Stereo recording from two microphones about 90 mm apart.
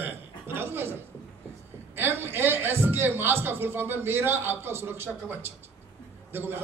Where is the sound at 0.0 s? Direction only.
25° right (ahead or behind).